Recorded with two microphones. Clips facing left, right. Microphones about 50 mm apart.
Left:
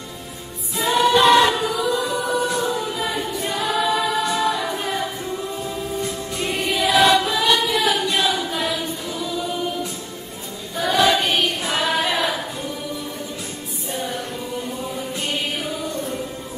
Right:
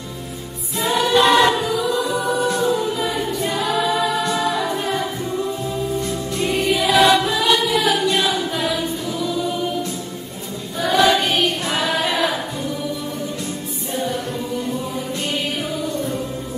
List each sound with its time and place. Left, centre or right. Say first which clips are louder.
0.7 s choir: even; centre
5.9 s music: right 3 dB; centre
10.8 s choir: right 2 dB; centre